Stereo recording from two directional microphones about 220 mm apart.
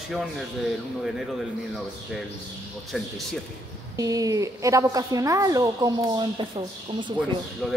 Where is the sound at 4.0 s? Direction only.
15° right (ahead or behind).